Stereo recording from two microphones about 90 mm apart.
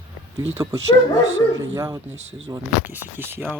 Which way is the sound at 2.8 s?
20° right (ahead or behind).